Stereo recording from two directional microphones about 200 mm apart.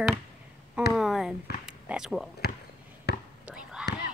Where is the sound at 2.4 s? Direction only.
50° left (ahead or behind).